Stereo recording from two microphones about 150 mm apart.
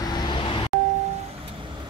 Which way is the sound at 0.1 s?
30° left (ahead or behind).